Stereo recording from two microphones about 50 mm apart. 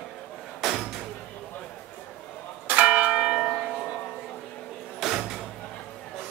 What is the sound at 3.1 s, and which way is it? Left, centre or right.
Church bell, centre.